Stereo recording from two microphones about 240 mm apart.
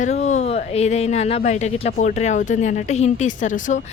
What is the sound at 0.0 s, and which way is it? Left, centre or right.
A woman's voice, left.